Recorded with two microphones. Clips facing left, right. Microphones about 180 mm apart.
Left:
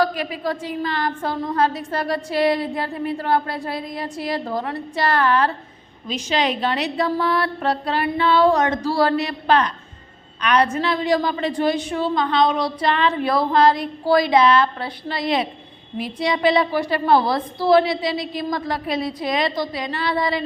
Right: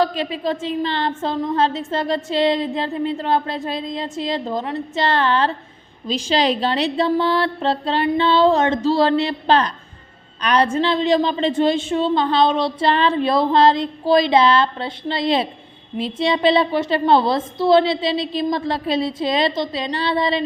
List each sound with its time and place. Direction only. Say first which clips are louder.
0.0 s a woman's voice: right 1 dB; 25° right (ahead or behind)